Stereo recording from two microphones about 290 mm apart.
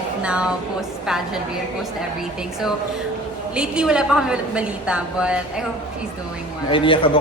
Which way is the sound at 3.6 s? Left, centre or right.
Centre.